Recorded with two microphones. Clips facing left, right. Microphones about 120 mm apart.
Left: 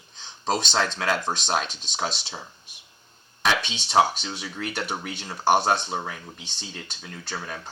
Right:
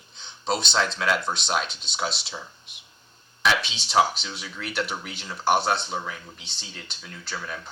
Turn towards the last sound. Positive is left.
turn(degrees=45)  # may be behind; listen again after turning